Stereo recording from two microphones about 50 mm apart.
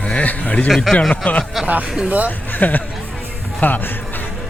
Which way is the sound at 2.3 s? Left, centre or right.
Left.